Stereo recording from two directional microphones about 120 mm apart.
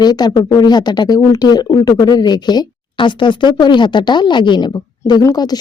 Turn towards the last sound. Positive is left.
turn(degrees=35)  # may be behind; listen again after turning